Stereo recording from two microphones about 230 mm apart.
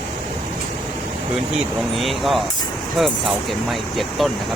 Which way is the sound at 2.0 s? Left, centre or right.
Centre.